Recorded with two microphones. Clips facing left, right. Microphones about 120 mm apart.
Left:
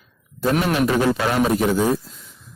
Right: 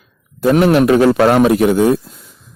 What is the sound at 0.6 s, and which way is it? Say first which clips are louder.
Speech: right 10 dB; 70° right (ahead or behind).